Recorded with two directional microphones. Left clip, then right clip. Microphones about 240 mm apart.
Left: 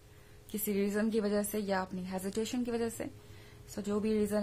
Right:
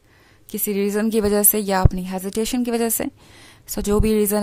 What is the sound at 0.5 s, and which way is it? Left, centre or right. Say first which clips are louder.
A woman's voice: right 12 dB; right.